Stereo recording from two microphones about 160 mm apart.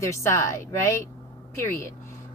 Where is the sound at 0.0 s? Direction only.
15° left (ahead or behind).